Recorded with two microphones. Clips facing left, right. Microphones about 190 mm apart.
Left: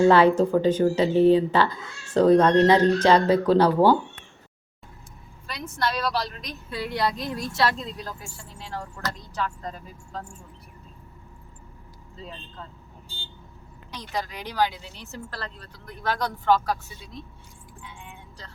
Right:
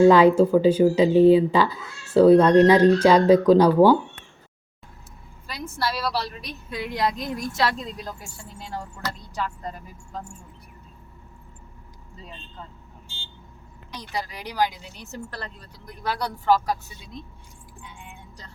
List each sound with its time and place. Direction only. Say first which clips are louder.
0.0 s speech: right 3 dB; 10° right (ahead or behind)
5.6 s speech: even; 10° right (ahead or behind)
6.7 s a woman's voice: right 1 dB; 20° right (ahead or behind)
8.5 s speech: right 1 dB; 10° right (ahead or behind)
13.9 s speech: even; 10° right (ahead or behind)